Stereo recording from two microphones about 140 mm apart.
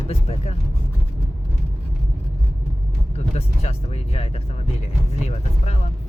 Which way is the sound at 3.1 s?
50° left (ahead or behind).